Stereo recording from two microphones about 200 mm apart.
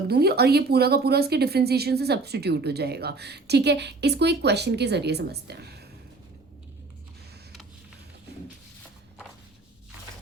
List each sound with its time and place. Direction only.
0.1 s speech: 55° right (ahead or behind)